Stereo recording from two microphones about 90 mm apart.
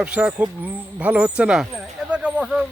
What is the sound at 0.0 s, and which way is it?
Speech, 15° right (ahead or behind).